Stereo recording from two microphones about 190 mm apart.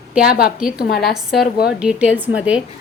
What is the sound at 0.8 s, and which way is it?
Speech, 55° left (ahead or behind).